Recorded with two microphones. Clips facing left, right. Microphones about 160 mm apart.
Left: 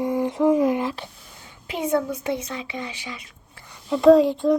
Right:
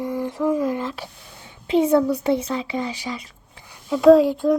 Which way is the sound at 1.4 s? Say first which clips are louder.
Right 9 dB; 30° right (ahead or behind).